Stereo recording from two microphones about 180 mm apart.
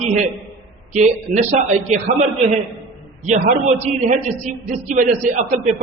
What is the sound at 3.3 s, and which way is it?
A man's voice, 40° right (ahead or behind).